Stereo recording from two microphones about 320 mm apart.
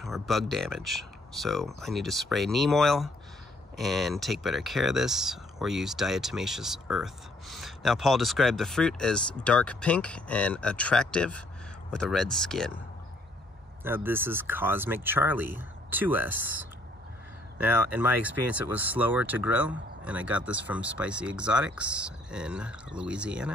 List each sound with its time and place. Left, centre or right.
0.0 s speech: centre
13.8 s speech: centre